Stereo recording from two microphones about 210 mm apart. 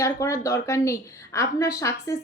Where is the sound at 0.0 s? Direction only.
15° left (ahead or behind).